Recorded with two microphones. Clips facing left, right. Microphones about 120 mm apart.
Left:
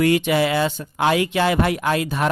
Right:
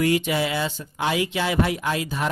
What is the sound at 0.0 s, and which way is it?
Speech, 65° left (ahead or behind).